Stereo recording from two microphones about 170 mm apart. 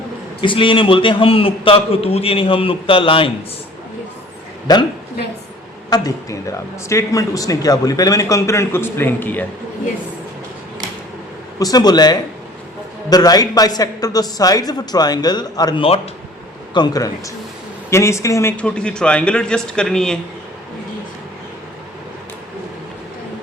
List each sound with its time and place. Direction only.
0.4 s a man's voice: 30° left (ahead or behind)
4.7 s speech: 25° left (ahead or behind)
5.9 s speech: 20° left (ahead or behind)
11.6 s speech: 25° left (ahead or behind)
18.5 s a man's voice: 5° left (ahead or behind)